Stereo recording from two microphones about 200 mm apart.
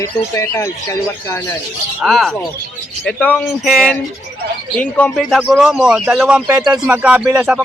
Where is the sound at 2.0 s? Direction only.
Centre (ahead or behind).